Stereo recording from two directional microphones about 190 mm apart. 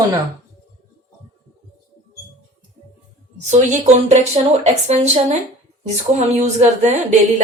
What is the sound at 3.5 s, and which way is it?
A woman's voice, 40° right (ahead or behind).